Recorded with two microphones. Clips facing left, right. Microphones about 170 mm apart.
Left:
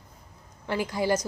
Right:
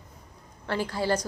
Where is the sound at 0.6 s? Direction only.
15° left (ahead or behind).